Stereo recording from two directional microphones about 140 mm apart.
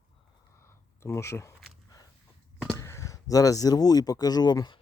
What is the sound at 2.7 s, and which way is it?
Speech, 20° left (ahead or behind).